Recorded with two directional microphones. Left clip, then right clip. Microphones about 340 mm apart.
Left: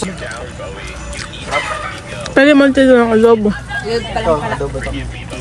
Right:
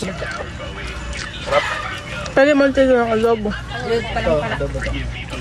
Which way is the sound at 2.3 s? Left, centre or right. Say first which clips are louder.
Left 4 dB; left.